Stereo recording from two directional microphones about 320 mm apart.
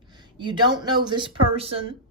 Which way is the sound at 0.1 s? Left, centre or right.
Centre.